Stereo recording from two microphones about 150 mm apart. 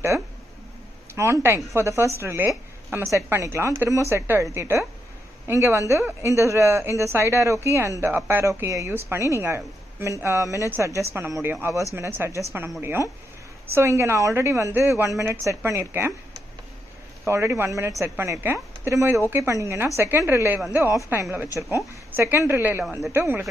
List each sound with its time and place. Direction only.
1.1 s a woman's voice: 15° right (ahead or behind)
17.3 s a woman's voice: 15° right (ahead or behind)